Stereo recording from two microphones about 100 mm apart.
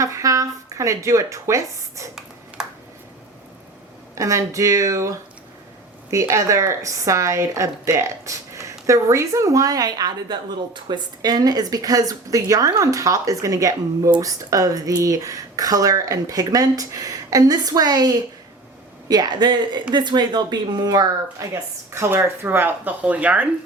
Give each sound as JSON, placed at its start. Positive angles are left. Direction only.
{"t": 0.0, "sound": "speech", "side_deg": -35}
{"t": 2.6, "sound": "a sound", "side_deg": -5}
{"t": 4.1, "sound": "speech", "side_deg": -30}